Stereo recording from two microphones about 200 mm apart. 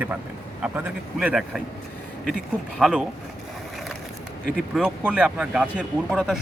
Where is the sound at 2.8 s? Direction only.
Centre (ahead or behind).